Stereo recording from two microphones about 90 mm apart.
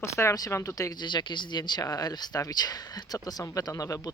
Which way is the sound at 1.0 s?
60° left (ahead or behind).